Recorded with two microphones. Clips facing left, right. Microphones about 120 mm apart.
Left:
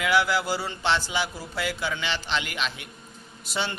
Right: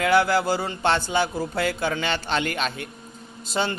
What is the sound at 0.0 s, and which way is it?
A man's voice, 45° right (ahead or behind).